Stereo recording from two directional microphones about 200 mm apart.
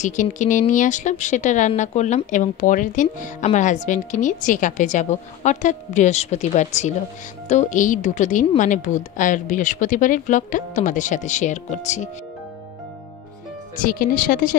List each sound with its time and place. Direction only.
0.0 s speech: 40° left (ahead or behind)
13.7 s speech: 45° left (ahead or behind)